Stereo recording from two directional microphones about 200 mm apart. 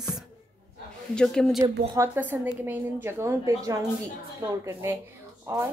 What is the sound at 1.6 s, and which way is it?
A woman's voice, 10° right (ahead or behind).